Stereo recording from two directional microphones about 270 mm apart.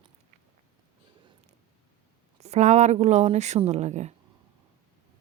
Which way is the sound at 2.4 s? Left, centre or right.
Right.